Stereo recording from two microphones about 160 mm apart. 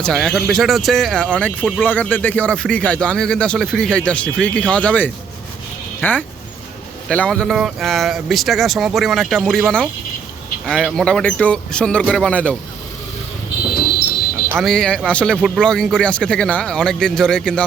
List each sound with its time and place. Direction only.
0.0 s a man's voice: 5° left (ahead or behind)
14.6 s a man's voice: 5° left (ahead or behind)